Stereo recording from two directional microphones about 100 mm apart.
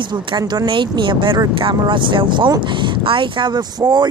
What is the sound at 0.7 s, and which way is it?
Speech, 55° right (ahead or behind).